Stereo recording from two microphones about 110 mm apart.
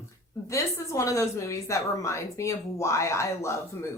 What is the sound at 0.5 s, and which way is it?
A woman's voice, 25° left (ahead or behind).